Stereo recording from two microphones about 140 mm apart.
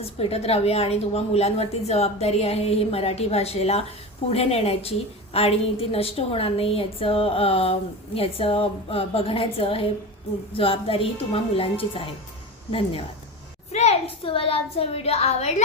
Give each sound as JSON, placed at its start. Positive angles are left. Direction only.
{"t": 0.0, "sound": "a woman's voice", "side_deg": 45}